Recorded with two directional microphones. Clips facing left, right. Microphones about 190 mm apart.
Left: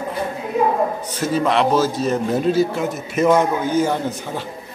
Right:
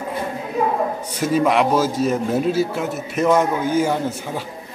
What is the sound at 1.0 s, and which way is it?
A man's voice, 10° right (ahead or behind).